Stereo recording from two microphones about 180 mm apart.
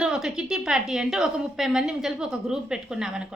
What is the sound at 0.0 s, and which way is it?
Speech, 5° right (ahead or behind).